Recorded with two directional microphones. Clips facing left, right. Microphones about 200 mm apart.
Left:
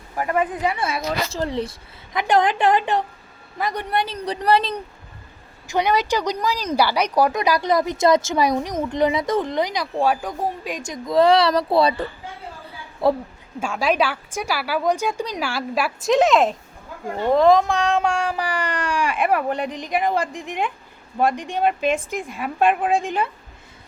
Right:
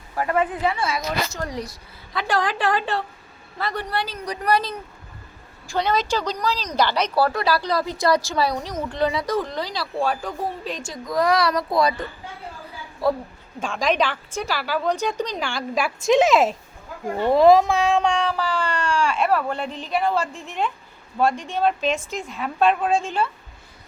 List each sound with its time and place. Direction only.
0.2 s speech: 15° left (ahead or behind)
0.9 s speech: 30° left (ahead or behind)
5.6 s speech: 15° left (ahead or behind)
13.6 s speech: 10° left (ahead or behind)